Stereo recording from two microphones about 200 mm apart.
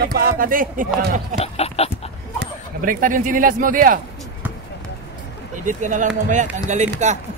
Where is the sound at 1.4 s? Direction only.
30° left (ahead or behind).